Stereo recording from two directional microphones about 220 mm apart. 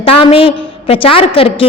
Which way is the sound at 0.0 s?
25° left (ahead or behind).